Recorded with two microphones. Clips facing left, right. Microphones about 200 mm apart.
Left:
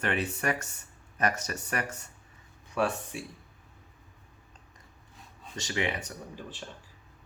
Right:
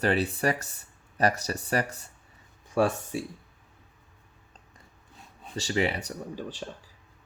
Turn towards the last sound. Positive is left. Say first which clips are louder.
# right 4 dB
turn(degrees=-35)  # may be behind; listen again after turning